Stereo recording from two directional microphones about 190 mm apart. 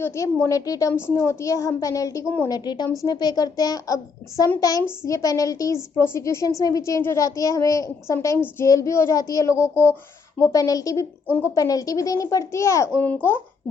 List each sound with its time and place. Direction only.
0.0 s a child's voice: 15° left (ahead or behind)